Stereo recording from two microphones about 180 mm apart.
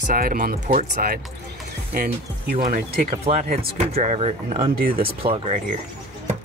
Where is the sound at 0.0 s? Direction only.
50° right (ahead or behind).